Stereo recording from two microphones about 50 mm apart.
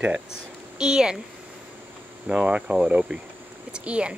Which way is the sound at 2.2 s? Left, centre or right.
Right.